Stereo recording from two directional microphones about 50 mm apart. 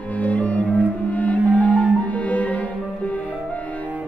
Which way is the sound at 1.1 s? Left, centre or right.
Left.